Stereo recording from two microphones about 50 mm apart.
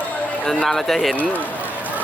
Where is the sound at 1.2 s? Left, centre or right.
Left.